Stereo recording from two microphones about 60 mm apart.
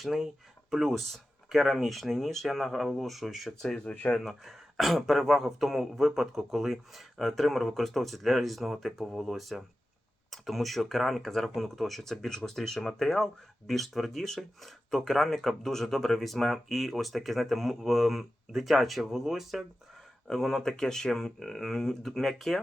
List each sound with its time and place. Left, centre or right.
0.0 s speech: centre
3.8 s speech: left
4.2 s speech: centre
20.2 s speech: centre